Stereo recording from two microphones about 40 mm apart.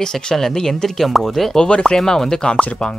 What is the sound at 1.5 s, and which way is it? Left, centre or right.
Speech, left.